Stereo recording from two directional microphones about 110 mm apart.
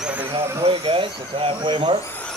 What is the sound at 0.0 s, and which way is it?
Vehicle, 15° right (ahead or behind).